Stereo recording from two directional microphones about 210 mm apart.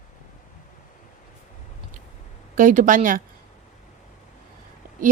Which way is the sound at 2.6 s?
40° right (ahead or behind).